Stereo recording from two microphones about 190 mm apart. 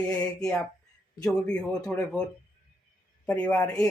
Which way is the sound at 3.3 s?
5° left (ahead or behind).